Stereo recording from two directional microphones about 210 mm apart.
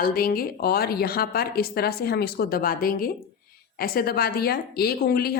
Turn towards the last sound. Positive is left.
turn(degrees=50)  # may be behind; listen again after turning